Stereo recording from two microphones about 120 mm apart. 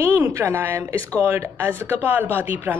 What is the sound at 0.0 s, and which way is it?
A woman's voice, 20° right (ahead or behind).